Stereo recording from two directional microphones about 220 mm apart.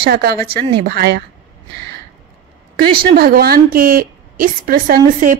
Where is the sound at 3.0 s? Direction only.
40° right (ahead or behind).